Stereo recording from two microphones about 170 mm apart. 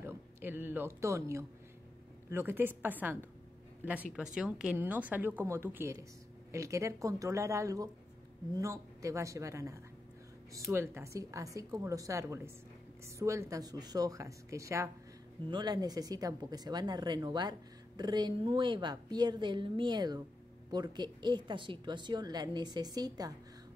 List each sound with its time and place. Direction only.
0.0 s speech: 10° right (ahead or behind)
4.4 s speech: 5° right (ahead or behind); by 23.3 s 20° right (ahead or behind)